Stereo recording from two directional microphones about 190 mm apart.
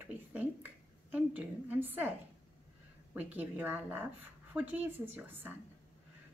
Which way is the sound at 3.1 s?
10° right (ahead or behind).